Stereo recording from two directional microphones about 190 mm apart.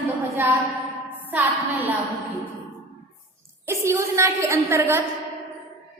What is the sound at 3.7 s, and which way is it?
A woman's voice, 15° right (ahead or behind).